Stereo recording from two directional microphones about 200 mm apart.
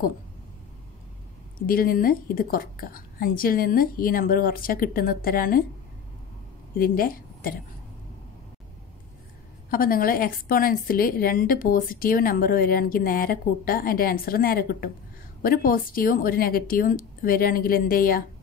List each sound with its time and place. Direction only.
1.7 s a woman's voice: 45° left (ahead or behind)
6.8 s a woman's voice: 45° left (ahead or behind)
9.7 s a woman's voice: 45° left (ahead or behind)